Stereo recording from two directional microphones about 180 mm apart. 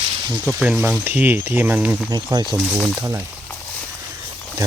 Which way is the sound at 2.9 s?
15° right (ahead or behind).